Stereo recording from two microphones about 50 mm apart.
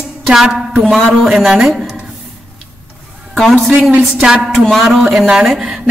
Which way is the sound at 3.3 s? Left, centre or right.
Centre.